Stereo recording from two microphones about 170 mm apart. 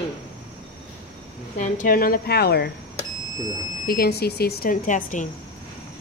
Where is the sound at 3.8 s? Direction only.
65° left (ahead or behind); by 5.2 s 50° left (ahead or behind).